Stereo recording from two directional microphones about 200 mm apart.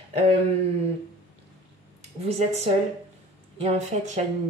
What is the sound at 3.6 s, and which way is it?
Speech, 35° right (ahead or behind).